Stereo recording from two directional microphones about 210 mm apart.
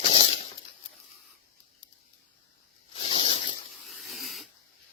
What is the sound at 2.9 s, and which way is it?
Zipper, 30° left (ahead or behind).